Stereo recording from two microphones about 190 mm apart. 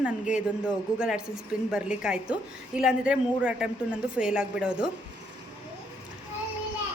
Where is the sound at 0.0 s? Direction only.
5° right (ahead or behind).